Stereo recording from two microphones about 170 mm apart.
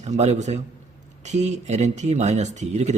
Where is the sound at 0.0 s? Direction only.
40° right (ahead or behind).